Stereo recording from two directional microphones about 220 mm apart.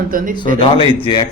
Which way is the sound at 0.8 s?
20° left (ahead or behind).